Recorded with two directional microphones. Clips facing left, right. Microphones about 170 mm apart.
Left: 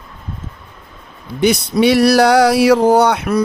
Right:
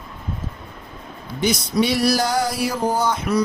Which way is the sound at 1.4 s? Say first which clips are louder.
Left 6 dB; 65° left (ahead or behind).